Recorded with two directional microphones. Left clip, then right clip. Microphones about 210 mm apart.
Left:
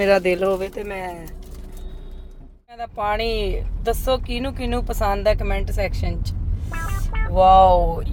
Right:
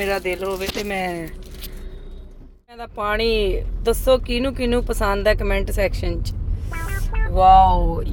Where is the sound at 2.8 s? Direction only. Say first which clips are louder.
Right 1 dB; 10° right (ahead or behind).